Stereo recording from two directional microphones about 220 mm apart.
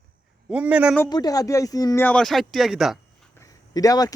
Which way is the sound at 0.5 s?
5° right (ahead or behind).